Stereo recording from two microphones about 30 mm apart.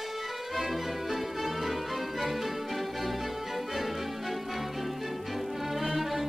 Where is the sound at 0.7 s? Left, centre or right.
Centre.